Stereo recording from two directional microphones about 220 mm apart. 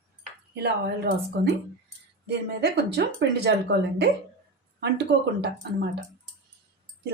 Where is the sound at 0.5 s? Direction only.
45° right (ahead or behind).